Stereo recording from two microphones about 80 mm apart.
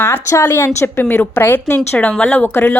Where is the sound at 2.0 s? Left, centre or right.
Centre.